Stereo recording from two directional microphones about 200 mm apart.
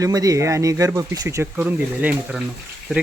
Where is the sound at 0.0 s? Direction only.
15° right (ahead or behind).